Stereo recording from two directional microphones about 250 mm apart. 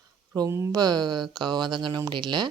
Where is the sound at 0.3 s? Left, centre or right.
Centre.